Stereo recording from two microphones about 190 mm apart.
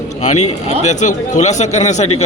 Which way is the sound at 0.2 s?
35° left (ahead or behind).